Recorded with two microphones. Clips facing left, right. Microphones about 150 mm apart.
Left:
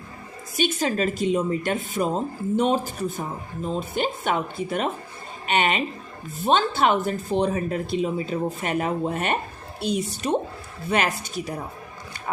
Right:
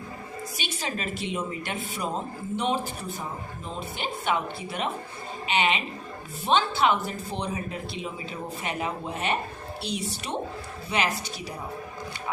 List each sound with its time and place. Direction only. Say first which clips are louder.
0.5 s speech: left 11 dB; 45° left (ahead or behind)